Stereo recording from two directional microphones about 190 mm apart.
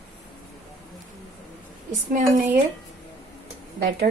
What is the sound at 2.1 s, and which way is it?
Speech, 40° right (ahead or behind).